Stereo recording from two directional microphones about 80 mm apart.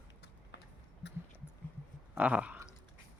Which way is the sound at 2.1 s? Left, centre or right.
Centre.